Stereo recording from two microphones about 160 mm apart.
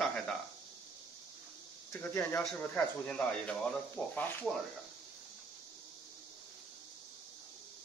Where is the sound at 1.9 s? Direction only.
15° left (ahead or behind).